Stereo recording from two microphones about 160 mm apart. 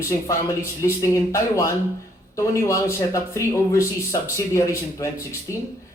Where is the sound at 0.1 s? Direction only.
20° left (ahead or behind).